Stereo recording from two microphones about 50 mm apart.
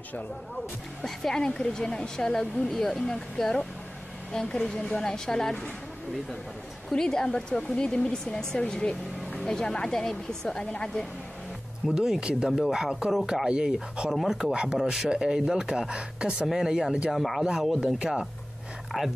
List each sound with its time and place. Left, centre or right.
1.0 s speech: centre
1.4 s speech: centre
6.9 s speech: centre
11.9 s speech: centre
14.8 s speech: centre
15.0 s speech: centre
17.1 s speech: centre
17.4 s speech: centre
18.9 s speech: centre